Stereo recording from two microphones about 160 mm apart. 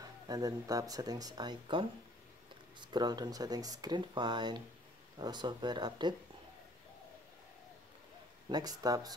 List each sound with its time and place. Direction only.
0.0 s speech: 25° right (ahead or behind)
8.5 s speech: 25° right (ahead or behind)